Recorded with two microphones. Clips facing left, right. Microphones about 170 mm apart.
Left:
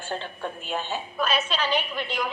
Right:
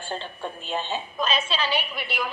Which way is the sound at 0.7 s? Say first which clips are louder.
Right 2 dB; 20° right (ahead or behind).